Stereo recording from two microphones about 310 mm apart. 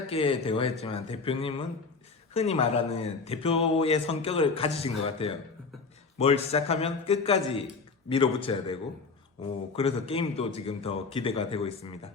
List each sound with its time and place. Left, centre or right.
0.1 s speech: centre